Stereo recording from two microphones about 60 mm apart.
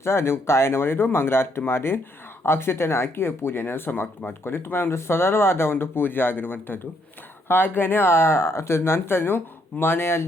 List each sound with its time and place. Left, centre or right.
0.0 s speech: left